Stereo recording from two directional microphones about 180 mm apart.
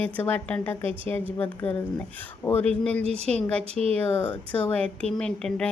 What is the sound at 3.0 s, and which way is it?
Speech, 35° right (ahead or behind).